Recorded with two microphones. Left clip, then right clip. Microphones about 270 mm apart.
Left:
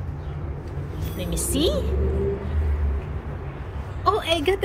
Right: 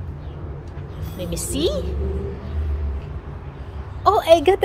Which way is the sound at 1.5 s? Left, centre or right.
Centre.